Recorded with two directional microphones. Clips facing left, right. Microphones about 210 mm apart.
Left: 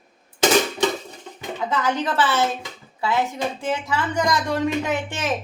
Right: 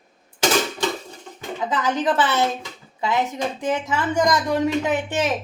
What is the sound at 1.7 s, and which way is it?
Speech, 20° right (ahead or behind).